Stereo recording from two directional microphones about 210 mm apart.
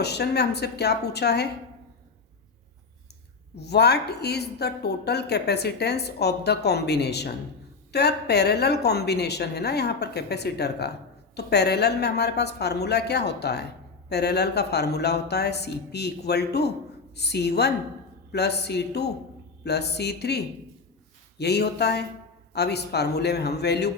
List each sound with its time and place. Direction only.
0.0 s a woman's voice: 50° left (ahead or behind)
3.6 s a woman's voice: 50° left (ahead or behind)